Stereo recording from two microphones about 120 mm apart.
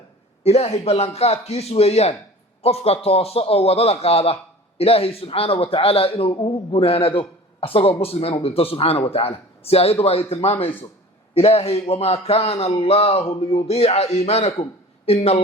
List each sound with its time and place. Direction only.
0.4 s a man's voice: 60° left (ahead or behind)